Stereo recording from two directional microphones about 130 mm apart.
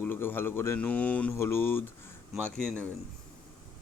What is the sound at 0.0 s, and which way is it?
A man's voice, 15° left (ahead or behind).